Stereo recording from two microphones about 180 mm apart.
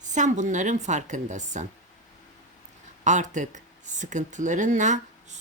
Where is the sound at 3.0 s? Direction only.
40° right (ahead or behind).